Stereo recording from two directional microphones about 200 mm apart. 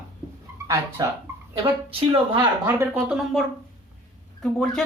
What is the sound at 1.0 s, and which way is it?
Speech, 20° right (ahead or behind).